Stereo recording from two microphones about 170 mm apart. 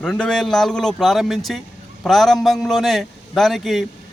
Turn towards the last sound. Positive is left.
turn(degrees=0)  # may be behind; listen again after turning